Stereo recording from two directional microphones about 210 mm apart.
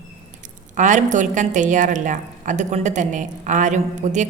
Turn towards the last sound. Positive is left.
turn(degrees=-35)  # may be behind; listen again after turning